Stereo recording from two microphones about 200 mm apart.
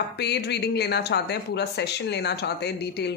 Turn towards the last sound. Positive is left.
turn(degrees=55)  # may be behind; listen again after turning